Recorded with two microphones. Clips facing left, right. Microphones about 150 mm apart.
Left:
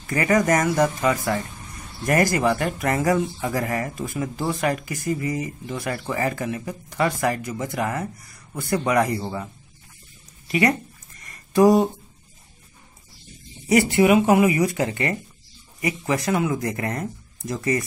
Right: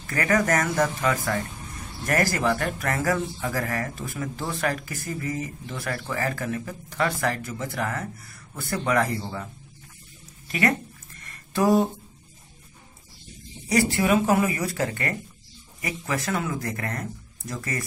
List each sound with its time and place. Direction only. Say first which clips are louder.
0.0 s speech: left 3 dB; 10° left (ahead or behind)
10.5 s speech: left 4 dB; 10° left (ahead or behind)
13.7 s speech: left 5 dB; 20° left (ahead or behind)